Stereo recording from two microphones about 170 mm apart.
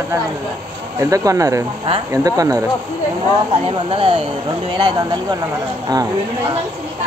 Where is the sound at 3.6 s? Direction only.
30° right (ahead or behind).